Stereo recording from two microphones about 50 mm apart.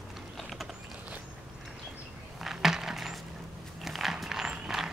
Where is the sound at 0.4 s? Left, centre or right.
Centre.